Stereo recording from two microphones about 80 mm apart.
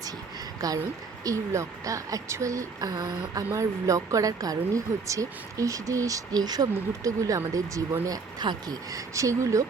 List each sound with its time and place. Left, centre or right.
0.6 s speech: right
3.5 s speech: right